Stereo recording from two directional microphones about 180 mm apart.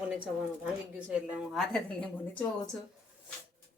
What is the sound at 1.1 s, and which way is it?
A woman's voice, centre (ahead or behind).